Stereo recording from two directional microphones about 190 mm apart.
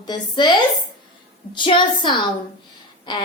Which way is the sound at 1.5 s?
25° left (ahead or behind).